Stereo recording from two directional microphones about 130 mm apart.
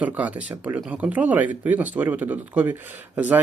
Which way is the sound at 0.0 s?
10° right (ahead or behind).